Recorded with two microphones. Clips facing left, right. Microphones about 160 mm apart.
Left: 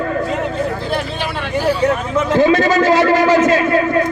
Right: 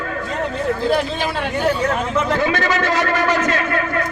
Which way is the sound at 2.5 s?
35° left (ahead or behind).